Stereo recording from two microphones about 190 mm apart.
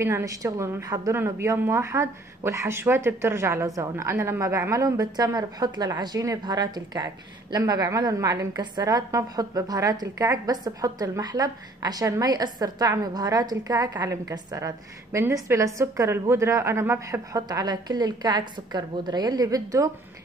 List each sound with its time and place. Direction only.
0.0 s a woman's voice: 15° right (ahead or behind)